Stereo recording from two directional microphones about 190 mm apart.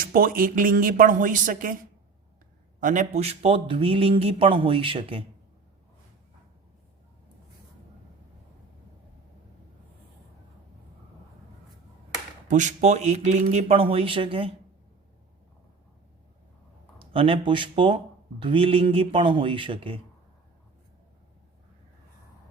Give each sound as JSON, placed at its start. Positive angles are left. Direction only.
{"t": 0.0, "sound": "speech", "side_deg": -50}
{"t": 12.5, "sound": "speech", "side_deg": -40}
{"t": 17.0, "sound": "speech", "side_deg": -30}